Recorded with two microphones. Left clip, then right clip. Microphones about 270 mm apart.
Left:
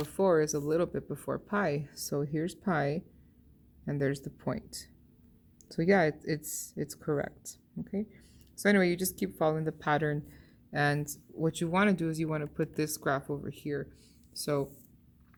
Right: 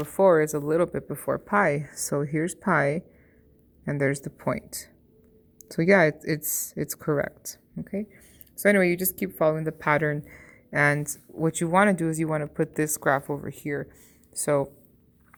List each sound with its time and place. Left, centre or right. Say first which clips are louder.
0.0 s speech: right 7 dB; centre